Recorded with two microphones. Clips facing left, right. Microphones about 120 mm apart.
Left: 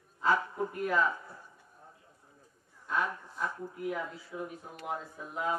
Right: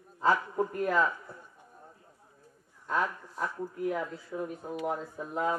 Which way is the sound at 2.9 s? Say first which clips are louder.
Right 2 dB; 40° right (ahead or behind).